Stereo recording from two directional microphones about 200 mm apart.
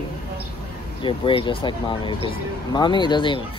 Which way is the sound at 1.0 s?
25° left (ahead or behind).